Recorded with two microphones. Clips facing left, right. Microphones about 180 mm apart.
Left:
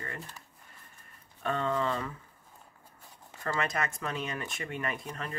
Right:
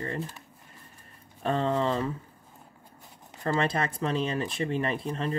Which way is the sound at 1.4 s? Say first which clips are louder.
Right 4 dB; 30° right (ahead or behind).